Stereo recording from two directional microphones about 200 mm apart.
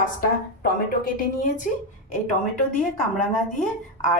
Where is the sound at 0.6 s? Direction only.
45° left (ahead or behind).